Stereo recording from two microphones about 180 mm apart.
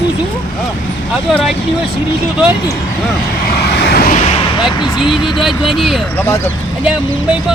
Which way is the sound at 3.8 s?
60° left (ahead or behind).